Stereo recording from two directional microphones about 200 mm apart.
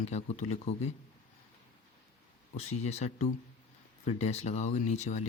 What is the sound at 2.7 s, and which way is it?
Speech, 35° left (ahead or behind).